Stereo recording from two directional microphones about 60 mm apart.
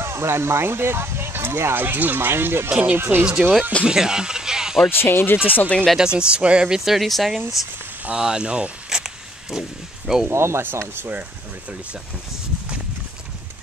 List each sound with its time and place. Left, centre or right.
0.0 s speech: right
2.7 s speech: right
3.0 s speech: right
3.8 s speech: centre
4.8 s speech: left
5.9 s speech: centre
8.0 s speech: centre
10.3 s speech: right